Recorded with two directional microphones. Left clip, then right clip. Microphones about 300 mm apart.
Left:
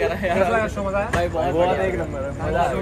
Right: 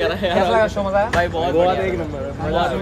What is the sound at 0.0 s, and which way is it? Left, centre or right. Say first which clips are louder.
Speech: right 2 dB; centre.